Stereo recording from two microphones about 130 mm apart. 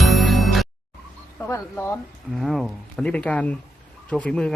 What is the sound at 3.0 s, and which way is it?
Speech, 10° left (ahead or behind).